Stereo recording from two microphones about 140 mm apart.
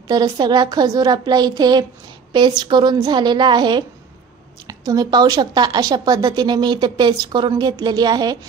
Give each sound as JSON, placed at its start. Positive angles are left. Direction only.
{"t": 0.1, "sound": "a woman's voice", "side_deg": -30}